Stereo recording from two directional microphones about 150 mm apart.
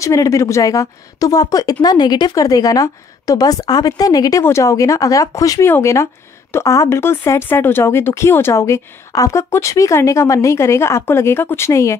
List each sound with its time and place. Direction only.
0.0 s a woman's voice: 20° left (ahead or behind)